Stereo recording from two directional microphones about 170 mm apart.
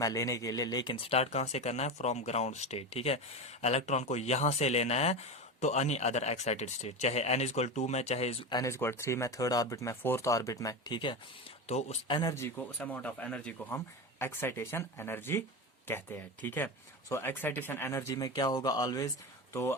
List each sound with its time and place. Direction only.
0.0 s speech: 20° left (ahead or behind)
11.7 s speech: 40° left (ahead or behind)
12.0 s speech: 30° left (ahead or behind)
12.3 s speech: 15° left (ahead or behind)